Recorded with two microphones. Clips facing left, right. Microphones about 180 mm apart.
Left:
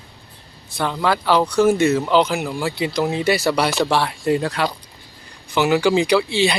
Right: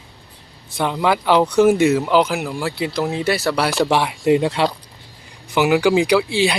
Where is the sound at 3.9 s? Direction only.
15° right (ahead or behind).